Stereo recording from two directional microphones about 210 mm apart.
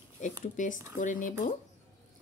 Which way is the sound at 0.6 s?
35° left (ahead or behind).